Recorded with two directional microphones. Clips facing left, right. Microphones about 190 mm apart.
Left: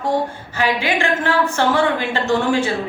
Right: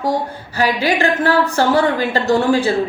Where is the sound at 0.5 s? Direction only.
35° right (ahead or behind).